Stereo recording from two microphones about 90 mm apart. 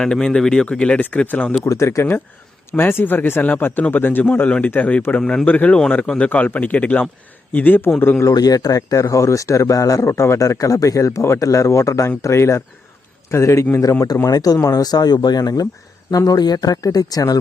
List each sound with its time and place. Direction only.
0.0 s speech: 10° left (ahead or behind)
1.6 s a man's voice: 35° left (ahead or behind)
8.2 s speech: 45° left (ahead or behind)
14.3 s speech: 45° left (ahead or behind)